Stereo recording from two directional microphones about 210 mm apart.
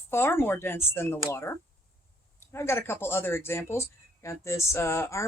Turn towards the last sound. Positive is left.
turn(degrees=15)  # may be behind; listen again after turning